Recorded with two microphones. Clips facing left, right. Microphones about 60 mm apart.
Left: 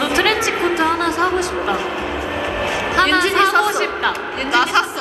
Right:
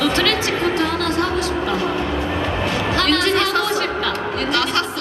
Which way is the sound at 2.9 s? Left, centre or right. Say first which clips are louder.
Left 4 dB; centre.